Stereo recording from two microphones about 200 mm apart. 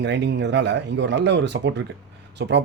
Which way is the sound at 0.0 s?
60° right (ahead or behind).